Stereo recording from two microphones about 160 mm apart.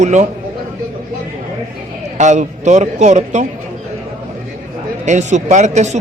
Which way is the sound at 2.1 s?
50° right (ahead or behind).